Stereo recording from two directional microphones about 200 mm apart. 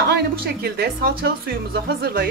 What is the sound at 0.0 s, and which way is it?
Speech, 50° right (ahead or behind).